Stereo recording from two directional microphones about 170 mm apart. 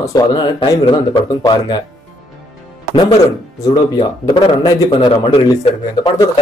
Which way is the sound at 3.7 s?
25° left (ahead or behind).